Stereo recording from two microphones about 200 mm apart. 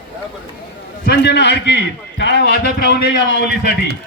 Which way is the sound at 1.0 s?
55° left (ahead or behind).